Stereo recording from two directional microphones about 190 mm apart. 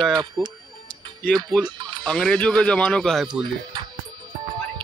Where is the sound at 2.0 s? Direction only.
5° left (ahead or behind).